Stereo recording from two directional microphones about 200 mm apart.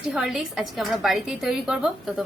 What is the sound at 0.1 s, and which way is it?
A woman's voice, centre (ahead or behind).